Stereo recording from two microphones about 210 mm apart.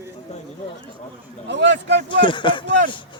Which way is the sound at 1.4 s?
55° right (ahead or behind).